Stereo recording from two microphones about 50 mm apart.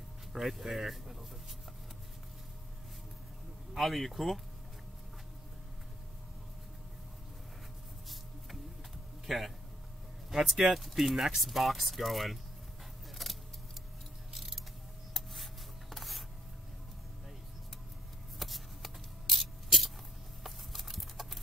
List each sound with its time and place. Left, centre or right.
0.3 s speech: centre
3.7 s speech: centre
9.2 s speech: centre
13.2 s vehicle: centre
14.3 s mechanisms: centre
15.9 s a sound: centre
18.4 s a sound: centre
20.4 s clip-clop: centre